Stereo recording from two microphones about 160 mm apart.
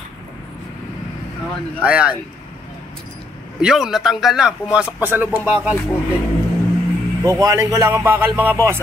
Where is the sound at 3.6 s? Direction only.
5° right (ahead or behind).